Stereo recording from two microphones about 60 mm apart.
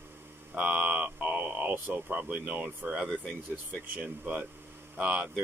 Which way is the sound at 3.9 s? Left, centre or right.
Right.